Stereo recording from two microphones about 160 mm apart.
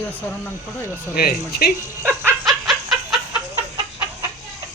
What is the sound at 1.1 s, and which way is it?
Speech, 75° left (ahead or behind).